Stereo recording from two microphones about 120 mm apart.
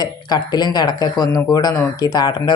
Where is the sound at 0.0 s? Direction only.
35° left (ahead or behind).